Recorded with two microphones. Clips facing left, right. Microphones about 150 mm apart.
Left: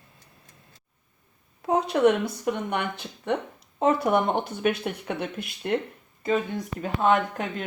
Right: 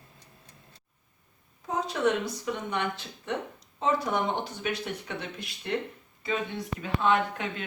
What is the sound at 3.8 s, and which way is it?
Speech, 60° left (ahead or behind).